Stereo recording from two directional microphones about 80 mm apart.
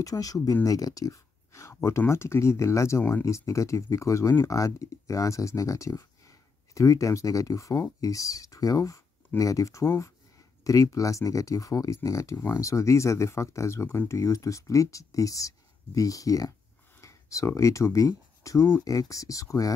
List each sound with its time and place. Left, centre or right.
0.0 s speech: left